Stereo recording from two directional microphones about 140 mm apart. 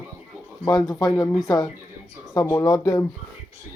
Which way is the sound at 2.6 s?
25° left (ahead or behind).